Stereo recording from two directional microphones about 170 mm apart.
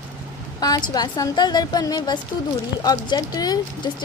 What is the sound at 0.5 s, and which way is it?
A woman's voice, 25° left (ahead or behind).